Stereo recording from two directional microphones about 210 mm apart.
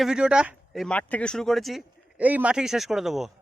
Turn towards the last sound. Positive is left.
turn(degrees=0)  # may be behind; listen again after turning